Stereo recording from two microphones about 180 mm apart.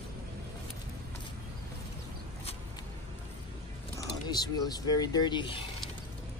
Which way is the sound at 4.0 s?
20° left (ahead or behind).